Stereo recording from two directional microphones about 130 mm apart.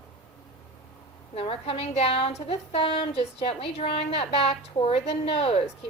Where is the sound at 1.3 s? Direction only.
50° left (ahead or behind).